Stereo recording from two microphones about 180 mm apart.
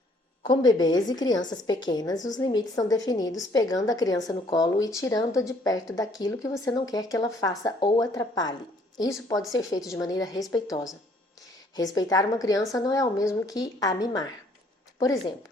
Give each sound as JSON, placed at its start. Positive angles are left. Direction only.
{"t": 0.4, "sound": "speech", "side_deg": 25}